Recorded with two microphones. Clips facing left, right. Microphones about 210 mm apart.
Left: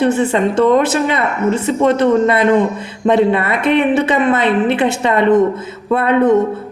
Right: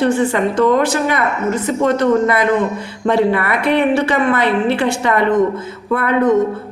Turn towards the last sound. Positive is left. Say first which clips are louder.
# left 2 dB
turn(degrees=25)  # may be behind; listen again after turning